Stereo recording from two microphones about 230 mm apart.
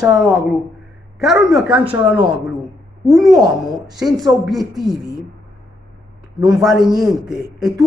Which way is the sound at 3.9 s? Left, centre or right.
Centre.